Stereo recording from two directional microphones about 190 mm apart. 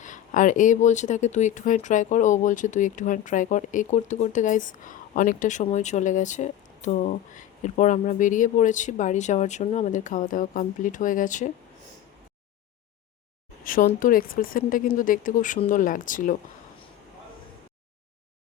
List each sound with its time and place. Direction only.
0.0 s speech: 40° left (ahead or behind)
13.7 s speech: 45° left (ahead or behind)